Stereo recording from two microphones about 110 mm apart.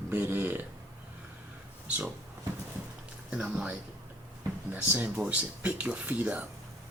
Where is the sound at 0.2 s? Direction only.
20° right (ahead or behind).